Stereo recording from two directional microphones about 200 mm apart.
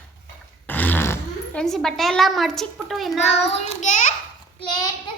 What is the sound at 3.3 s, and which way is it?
Child singing, 30° left (ahead or behind).